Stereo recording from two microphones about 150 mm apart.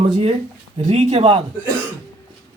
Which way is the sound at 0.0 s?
40° right (ahead or behind).